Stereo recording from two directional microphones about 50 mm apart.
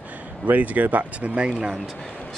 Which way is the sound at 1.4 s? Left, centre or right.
Centre.